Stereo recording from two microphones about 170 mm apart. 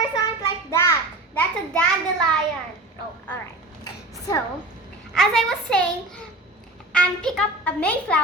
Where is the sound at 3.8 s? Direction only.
20° left (ahead or behind).